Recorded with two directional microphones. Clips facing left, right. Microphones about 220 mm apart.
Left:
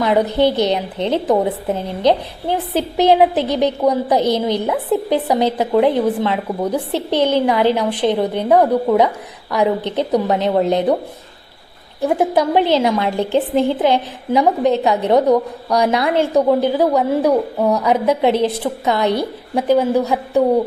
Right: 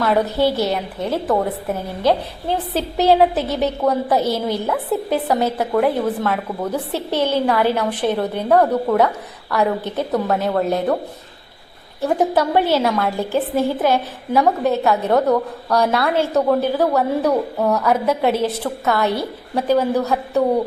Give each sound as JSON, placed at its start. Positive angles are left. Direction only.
{"t": 0.0, "sound": "a woman's voice", "side_deg": 15}
{"t": 12.0, "sound": "a woman's voice", "side_deg": 10}